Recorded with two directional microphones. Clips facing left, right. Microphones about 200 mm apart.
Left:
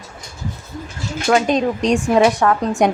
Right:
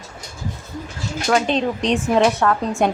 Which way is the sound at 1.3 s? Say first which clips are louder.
Left 3 dB; 10° left (ahead or behind).